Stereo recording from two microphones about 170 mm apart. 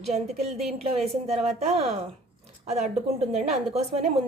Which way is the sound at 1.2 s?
35° right (ahead or behind).